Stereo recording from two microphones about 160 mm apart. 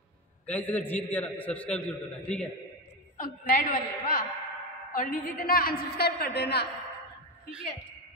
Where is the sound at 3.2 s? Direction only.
60° left (ahead or behind); by 6.6 s 90° left.